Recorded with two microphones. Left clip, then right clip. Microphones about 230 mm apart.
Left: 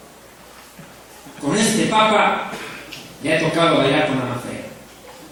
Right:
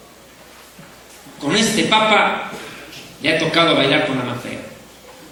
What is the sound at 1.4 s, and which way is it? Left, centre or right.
A man's voice, right.